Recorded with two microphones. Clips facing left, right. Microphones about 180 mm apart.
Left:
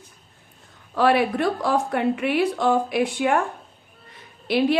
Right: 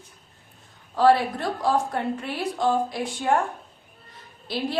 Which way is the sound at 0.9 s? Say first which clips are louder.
Even; 70° left (ahead or behind).